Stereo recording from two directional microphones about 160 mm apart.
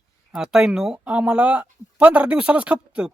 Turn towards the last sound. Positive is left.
turn(degrees=-5)  # may be behind; listen again after turning